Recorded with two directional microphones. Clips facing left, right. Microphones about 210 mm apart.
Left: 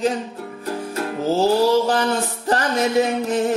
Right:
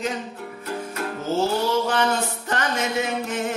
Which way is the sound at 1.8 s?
35° left (ahead or behind).